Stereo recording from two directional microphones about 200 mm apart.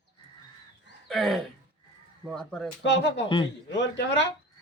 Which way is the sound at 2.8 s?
65° left (ahead or behind).